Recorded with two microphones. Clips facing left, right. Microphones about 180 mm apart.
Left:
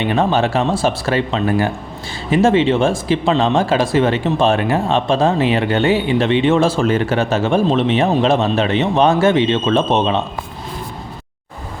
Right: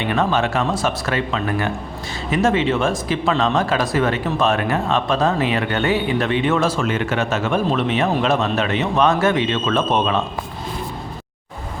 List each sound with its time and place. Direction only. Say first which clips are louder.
0.0 s speech: left 3 dB; 30° left (ahead or behind)